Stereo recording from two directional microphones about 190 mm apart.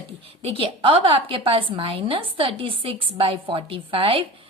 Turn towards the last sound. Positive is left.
turn(degrees=-30)  # may be behind; listen again after turning